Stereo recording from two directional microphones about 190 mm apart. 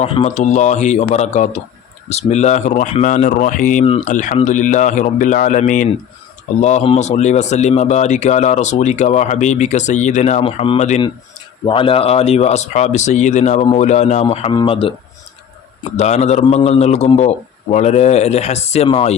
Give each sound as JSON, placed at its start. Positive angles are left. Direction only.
{"t": 0.0, "sound": "speech", "side_deg": 35}
{"t": 16.0, "sound": "speech", "side_deg": 35}